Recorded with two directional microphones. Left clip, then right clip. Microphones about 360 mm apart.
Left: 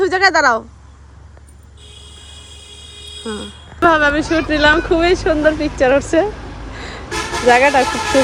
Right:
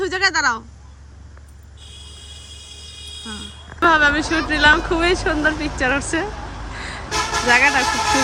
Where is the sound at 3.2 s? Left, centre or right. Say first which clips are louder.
Left 9 dB; centre.